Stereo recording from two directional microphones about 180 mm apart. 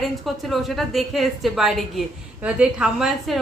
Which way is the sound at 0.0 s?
Centre (ahead or behind).